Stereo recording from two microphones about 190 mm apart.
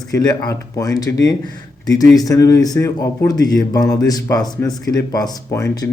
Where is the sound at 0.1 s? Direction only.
20° left (ahead or behind).